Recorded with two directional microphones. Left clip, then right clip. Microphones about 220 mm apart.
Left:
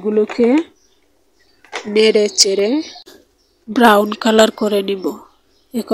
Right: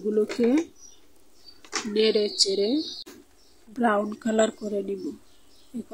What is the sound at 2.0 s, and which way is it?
Speech, 25° left (ahead or behind).